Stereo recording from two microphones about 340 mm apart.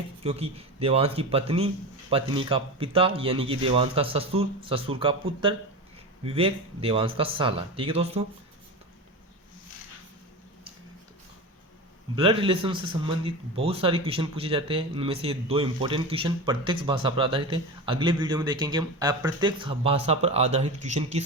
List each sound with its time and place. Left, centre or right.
0.3 s a man's voice: centre
6.2 s a man's voice: centre
12.1 s a man's voice: centre